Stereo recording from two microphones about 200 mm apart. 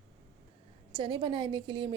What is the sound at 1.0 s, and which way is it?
Speech, 25° right (ahead or behind).